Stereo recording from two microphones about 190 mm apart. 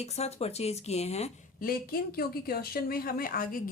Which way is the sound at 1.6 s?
50° left (ahead or behind).